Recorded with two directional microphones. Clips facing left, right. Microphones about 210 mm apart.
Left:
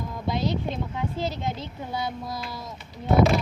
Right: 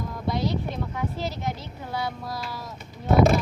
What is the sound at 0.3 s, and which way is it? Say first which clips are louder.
Vehicle: even; 20° left (ahead or behind).